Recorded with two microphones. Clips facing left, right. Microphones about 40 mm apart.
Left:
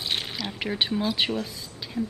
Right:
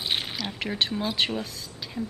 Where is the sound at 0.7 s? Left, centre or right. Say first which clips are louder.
Left 1 dB; centre.